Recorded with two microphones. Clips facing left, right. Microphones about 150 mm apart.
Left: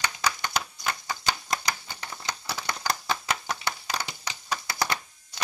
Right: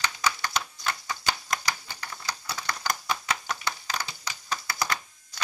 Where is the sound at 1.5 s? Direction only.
25° left (ahead or behind).